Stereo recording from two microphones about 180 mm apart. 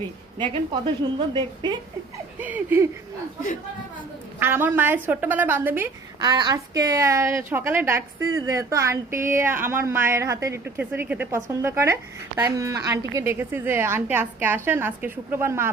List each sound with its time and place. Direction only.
0.3 s a woman's voice: 25° right (ahead or behind)
2.4 s a woman's voice: 10° right (ahead or behind)
4.4 s a woman's voice: 10° right (ahead or behind)
6.1 s a woman's voice: 25° right (ahead or behind)